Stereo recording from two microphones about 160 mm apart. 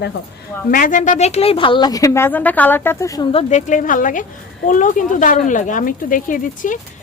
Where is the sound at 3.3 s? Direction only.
50° left (ahead or behind).